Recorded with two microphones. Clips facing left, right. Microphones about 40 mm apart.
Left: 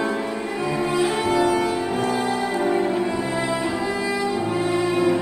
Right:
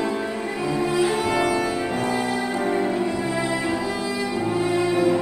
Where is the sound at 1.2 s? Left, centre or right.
Right.